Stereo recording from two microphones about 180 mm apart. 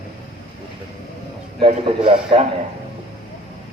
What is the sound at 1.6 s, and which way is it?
Speech, 30° right (ahead or behind).